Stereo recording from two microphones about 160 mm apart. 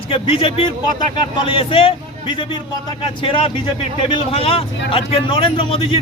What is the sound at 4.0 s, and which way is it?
A man's voice, 35° left (ahead or behind).